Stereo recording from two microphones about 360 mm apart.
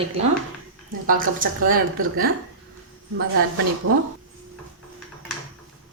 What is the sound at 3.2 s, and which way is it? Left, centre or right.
Speech, right.